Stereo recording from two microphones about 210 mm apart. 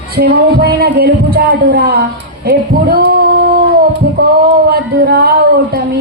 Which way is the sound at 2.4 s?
45° right (ahead or behind).